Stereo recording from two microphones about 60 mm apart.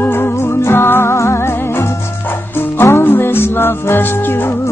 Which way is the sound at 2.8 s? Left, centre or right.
Left.